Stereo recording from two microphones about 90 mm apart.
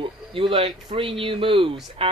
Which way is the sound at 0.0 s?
75° right (ahead or behind).